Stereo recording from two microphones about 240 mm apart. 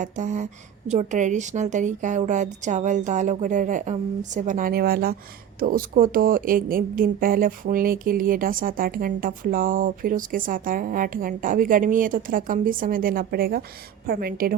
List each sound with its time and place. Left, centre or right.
0.0 s a woman's voice: right